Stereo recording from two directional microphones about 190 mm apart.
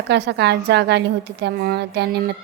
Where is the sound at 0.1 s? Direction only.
60° right (ahead or behind).